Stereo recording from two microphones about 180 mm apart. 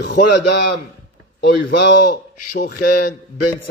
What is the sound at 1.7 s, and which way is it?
Speech, 85° left.